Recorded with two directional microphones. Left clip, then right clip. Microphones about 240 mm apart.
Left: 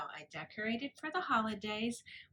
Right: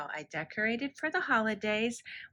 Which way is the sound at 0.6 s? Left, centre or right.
Centre.